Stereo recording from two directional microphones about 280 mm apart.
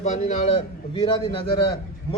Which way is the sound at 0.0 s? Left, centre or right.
Left.